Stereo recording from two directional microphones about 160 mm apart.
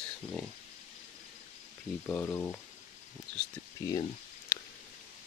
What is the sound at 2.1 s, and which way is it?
Speech, 15° left (ahead or behind).